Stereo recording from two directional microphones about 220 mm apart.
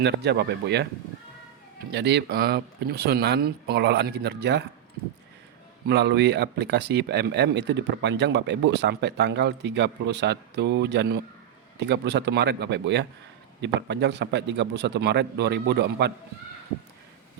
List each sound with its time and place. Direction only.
0.0 s speech: 50° right (ahead or behind)
1.9 s speech: 50° right (ahead or behind)
5.9 s speech: 50° right (ahead or behind)